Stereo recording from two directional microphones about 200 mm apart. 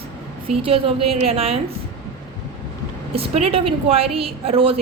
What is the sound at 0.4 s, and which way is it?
A woman's voice, 25° right (ahead or behind).